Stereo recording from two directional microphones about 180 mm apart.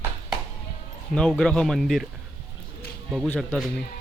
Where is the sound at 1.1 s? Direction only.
5° left (ahead or behind).